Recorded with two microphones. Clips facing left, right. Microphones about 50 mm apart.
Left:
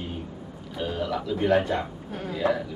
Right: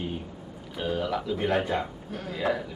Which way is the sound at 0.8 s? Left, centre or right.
Centre.